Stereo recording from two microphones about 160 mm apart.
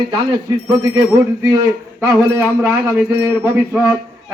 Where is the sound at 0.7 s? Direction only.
25° right (ahead or behind).